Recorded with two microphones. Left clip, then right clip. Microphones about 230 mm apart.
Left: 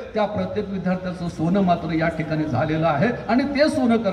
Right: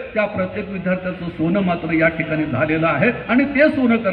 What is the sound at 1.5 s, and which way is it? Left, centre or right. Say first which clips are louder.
A man's voice: even; left.